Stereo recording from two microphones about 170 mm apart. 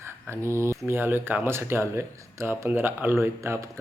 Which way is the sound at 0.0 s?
15° right (ahead or behind).